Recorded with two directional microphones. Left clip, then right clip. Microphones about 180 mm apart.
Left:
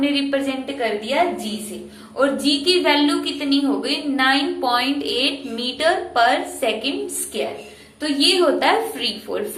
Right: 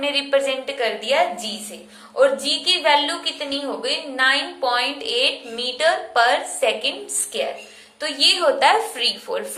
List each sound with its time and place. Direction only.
0.0 s a woman's voice: 20° right (ahead or behind)
2.1 s a woman's voice: 15° right (ahead or behind)